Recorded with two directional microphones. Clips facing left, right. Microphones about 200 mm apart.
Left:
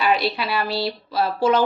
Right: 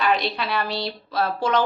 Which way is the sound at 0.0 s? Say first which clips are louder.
Left 2 dB; 5° left (ahead or behind).